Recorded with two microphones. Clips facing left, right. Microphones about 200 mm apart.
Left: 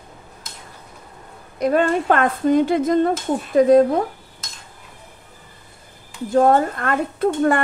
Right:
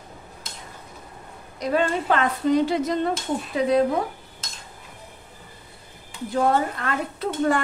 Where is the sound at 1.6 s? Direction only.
50° left (ahead or behind).